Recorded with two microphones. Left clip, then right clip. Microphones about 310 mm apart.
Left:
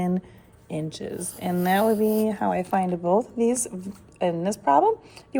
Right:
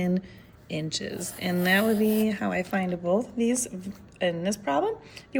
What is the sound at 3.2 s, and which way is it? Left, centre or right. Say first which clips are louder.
A woman's voice: left 4 dB; centre.